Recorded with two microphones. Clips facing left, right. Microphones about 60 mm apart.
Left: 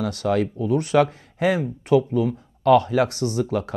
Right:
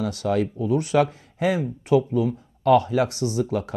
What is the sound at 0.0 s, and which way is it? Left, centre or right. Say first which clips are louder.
Speech: left 1 dB; left.